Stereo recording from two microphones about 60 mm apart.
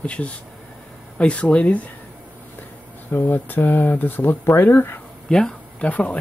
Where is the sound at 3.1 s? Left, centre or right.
Left.